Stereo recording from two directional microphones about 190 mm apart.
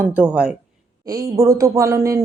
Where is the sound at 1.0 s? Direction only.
20° right (ahead or behind).